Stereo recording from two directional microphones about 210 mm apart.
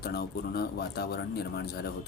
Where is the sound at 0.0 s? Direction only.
45° left (ahead or behind).